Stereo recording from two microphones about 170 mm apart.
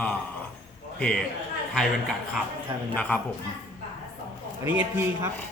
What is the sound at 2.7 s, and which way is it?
Speech, 30° right (ahead or behind).